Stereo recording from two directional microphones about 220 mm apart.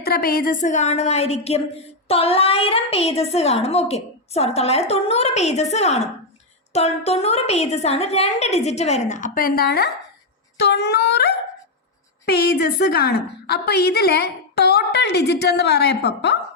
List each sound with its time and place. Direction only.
0.0 s a woman's voice: 45° left (ahead or behind)
12.9 s a woman's voice: 50° left (ahead or behind)